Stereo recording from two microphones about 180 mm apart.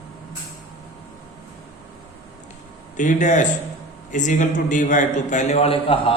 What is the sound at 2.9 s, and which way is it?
A man's voice, 45° left (ahead or behind).